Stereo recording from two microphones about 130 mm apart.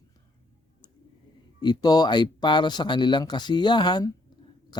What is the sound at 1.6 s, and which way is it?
A man's voice, 30° left (ahead or behind).